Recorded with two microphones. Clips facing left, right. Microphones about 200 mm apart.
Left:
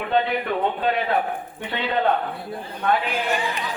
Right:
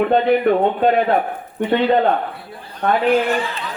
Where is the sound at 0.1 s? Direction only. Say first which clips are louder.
Right 8 dB; 50° right (ahead or behind).